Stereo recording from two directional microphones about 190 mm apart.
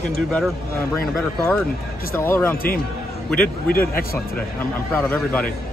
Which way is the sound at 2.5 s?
50° left (ahead or behind).